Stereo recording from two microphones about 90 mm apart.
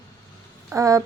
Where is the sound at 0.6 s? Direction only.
35° right (ahead or behind).